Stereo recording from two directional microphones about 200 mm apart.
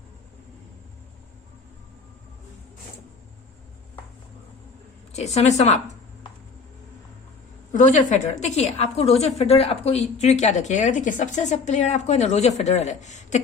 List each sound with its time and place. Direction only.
5.1 s a woman's voice: 35° left (ahead or behind)
7.7 s a woman's voice: 40° left (ahead or behind)